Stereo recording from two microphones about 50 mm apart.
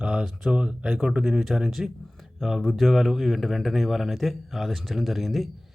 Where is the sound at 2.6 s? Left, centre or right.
Centre.